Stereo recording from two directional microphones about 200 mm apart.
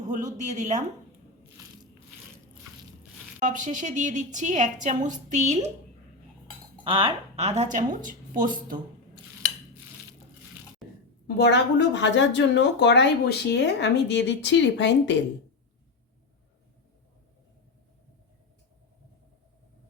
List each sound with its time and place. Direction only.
0.0 s a woman's voice: 35° right (ahead or behind)
3.4 s a woman's voice: 40° right (ahead or behind)
6.8 s a woman's voice: 30° right (ahead or behind)
10.8 s a sound: centre (ahead or behind)
11.3 s speech: 60° left (ahead or behind)